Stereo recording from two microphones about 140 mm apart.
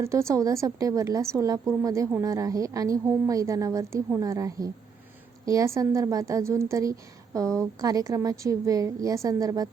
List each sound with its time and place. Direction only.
0.0 s a woman's voice: 20° right (ahead or behind)